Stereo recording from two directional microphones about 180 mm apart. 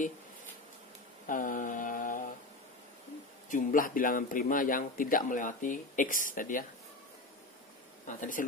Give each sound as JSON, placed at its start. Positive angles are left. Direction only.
{"t": 1.2, "sound": "mantra", "side_deg": 50}
{"t": 3.4, "sound": "speech", "side_deg": 50}
{"t": 8.2, "sound": "speech", "side_deg": 45}